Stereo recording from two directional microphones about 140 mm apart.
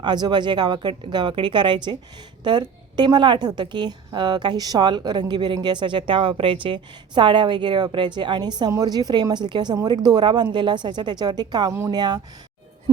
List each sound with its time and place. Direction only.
0.0 s a woman's voice: 30° right (ahead or behind)